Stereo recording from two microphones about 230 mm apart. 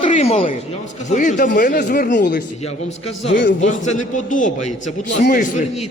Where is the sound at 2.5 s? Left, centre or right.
Left.